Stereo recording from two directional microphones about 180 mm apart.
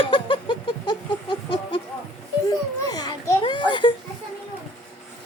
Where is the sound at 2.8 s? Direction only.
20° left (ahead or behind).